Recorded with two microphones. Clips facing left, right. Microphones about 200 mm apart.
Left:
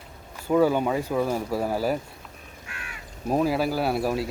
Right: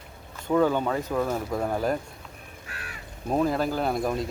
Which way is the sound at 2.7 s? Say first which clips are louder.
Even; 35° right (ahead or behind).